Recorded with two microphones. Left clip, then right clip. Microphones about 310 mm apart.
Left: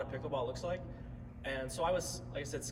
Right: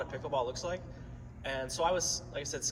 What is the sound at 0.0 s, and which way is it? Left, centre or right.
Speech, right.